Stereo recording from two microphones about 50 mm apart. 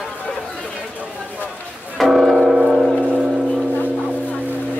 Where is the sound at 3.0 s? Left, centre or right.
Centre.